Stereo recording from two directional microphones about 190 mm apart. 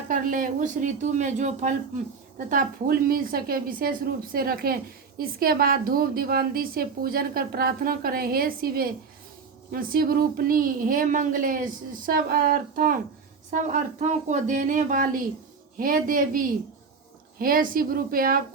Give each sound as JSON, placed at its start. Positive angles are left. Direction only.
{"t": 0.1, "sound": "a woman's voice", "side_deg": -45}